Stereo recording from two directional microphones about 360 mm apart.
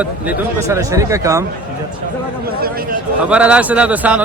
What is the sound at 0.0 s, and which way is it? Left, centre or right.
Speech, centre.